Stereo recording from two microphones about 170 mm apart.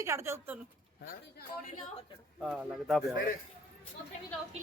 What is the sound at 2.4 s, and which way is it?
Speech, 5° right (ahead or behind).